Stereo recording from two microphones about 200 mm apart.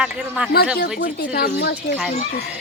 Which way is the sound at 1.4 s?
55° left (ahead or behind).